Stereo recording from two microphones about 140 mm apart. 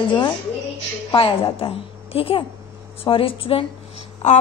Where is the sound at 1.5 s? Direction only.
45° left (ahead or behind).